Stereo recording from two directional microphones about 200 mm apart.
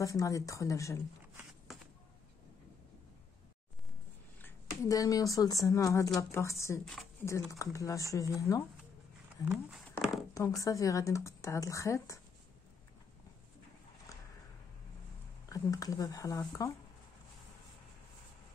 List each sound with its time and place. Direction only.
0.0 s speech: 15° left (ahead or behind)
4.4 s speech: 15° left (ahead or behind)
6.8 s speech: centre (ahead or behind)
7.2 s speech: 15° left (ahead or behind)
9.4 s speech: 5° right (ahead or behind)
10.3 s speech: 15° left (ahead or behind)
14.1 s a sound: 15° left (ahead or behind)
15.4 s speech: 15° left (ahead or behind)